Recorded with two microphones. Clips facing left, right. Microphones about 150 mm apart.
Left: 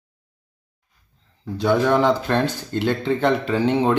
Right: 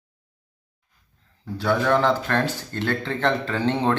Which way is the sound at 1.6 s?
15° left (ahead or behind).